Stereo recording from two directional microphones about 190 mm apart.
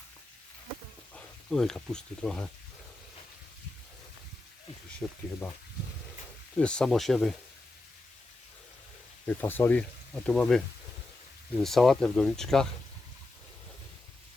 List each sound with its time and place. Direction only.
1.1 s speech: centre (ahead or behind)
5.0 s speech: 5° left (ahead or behind)
6.6 s speech: 5° left (ahead or behind)
9.2 s speech: 10° left (ahead or behind)
11.6 s speech: centre (ahead or behind)